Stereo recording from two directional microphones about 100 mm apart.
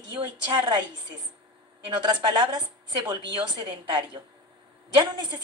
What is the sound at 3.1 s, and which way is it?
A woman's voice, 45° right (ahead or behind).